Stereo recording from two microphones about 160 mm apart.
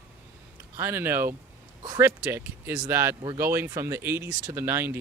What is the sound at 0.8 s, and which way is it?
Speech, 15° right (ahead or behind).